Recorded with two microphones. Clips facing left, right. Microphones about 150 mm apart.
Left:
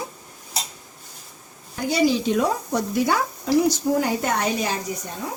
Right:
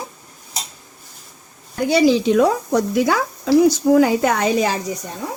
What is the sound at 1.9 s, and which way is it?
Speech, 90° right.